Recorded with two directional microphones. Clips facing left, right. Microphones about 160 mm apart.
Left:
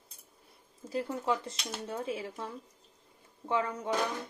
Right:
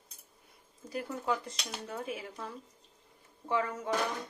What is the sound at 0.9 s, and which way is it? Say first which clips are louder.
Speech: left 2 dB; 25° left (ahead or behind).